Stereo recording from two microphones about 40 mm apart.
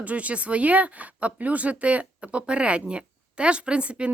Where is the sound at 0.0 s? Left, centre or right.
Right.